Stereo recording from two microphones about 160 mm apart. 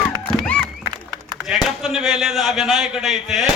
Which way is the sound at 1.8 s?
5° right (ahead or behind).